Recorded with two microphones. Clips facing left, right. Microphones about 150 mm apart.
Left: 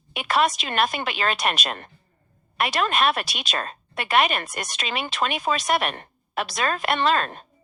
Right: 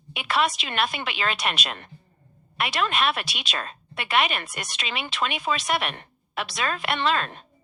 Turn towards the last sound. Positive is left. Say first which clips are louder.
# left 3 dB
turn(degrees=45)  # may be behind; listen again after turning